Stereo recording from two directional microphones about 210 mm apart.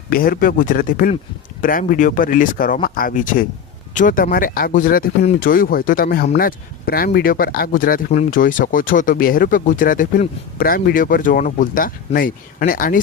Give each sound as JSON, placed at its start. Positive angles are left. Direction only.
{"t": 0.1, "sound": "speech", "side_deg": 45}